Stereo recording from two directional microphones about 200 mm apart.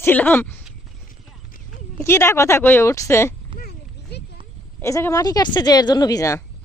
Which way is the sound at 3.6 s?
50° left (ahead or behind).